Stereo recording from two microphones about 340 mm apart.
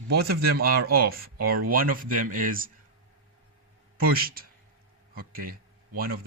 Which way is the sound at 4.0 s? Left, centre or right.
Right.